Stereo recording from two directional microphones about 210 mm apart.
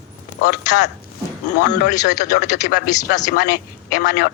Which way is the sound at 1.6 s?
35° left (ahead or behind).